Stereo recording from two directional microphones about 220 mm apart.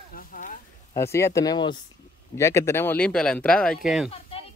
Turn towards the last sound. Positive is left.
turn(degrees=0)  # may be behind; listen again after turning